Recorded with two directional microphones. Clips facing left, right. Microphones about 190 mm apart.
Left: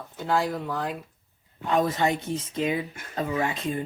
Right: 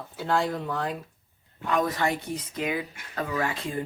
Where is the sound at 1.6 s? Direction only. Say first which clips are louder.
Left 2 dB; 25° left (ahead or behind).